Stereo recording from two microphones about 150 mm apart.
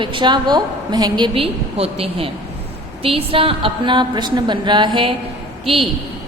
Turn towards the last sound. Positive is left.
turn(degrees=-40)  # may be behind; listen again after turning